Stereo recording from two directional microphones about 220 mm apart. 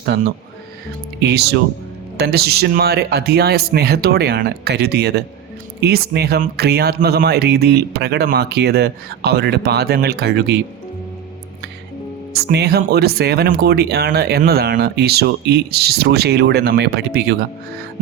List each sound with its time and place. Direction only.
0.0 s speech: 50° right (ahead or behind)
12.3 s speech: 45° right (ahead or behind)